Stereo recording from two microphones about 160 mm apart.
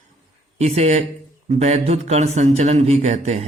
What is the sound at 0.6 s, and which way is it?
A man's voice, 45° right (ahead or behind).